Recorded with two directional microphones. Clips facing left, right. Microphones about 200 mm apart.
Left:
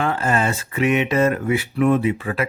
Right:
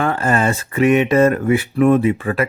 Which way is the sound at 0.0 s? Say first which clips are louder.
Right 3 dB; 50° right (ahead or behind).